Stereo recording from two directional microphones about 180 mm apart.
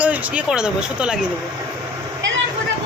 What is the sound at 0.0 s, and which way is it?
Speech, 5° right (ahead or behind).